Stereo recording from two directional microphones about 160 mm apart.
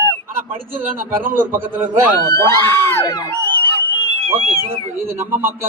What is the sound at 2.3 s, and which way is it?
Speech, 15° left (ahead or behind).